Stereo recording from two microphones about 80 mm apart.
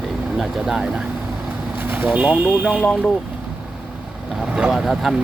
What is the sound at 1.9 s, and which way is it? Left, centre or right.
Speech, centre.